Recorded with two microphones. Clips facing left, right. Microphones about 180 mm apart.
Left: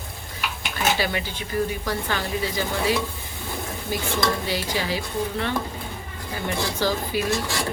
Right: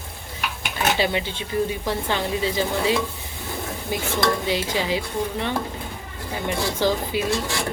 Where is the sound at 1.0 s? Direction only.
25° right (ahead or behind).